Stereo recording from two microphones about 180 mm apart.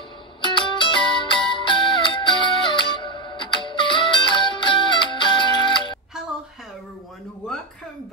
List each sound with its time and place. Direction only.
0.4 s music: 25° left (ahead or behind)